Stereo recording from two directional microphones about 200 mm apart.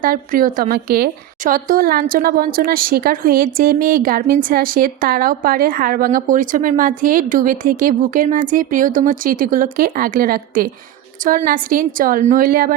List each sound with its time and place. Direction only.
0.0 s a woman's voice: 45° right (ahead or behind)